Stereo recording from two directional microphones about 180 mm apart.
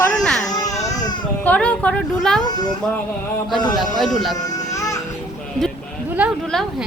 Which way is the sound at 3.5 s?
25° left (ahead or behind).